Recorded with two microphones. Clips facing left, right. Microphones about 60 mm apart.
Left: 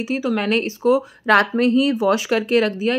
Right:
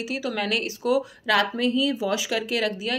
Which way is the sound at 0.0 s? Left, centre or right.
Left.